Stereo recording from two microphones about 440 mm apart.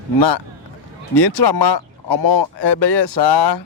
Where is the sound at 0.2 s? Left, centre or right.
Left.